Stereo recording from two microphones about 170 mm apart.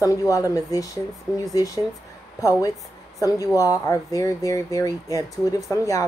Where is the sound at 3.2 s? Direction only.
20° left (ahead or behind).